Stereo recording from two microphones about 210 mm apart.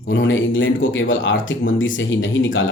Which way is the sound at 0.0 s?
60° left (ahead or behind).